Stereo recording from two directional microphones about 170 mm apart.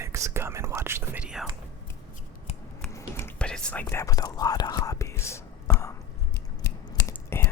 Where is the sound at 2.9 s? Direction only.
15° left (ahead or behind).